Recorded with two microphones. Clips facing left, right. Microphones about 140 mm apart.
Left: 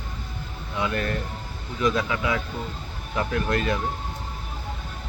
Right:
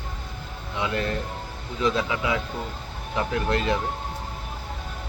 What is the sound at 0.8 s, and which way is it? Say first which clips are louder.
Speech: even; 25° right (ahead or behind).